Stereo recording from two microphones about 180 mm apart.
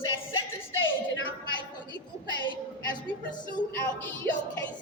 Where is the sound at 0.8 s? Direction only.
90° left.